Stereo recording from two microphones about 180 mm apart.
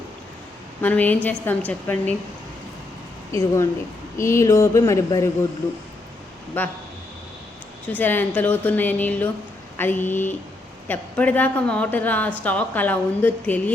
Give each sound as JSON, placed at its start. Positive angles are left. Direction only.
{"t": 0.8, "sound": "a woman's voice", "side_deg": 10}
{"t": 3.3, "sound": "a woman's voice", "side_deg": 15}
{"t": 6.5, "sound": "a woman's voice", "side_deg": 10}
{"t": 7.9, "sound": "a woman's voice", "side_deg": 10}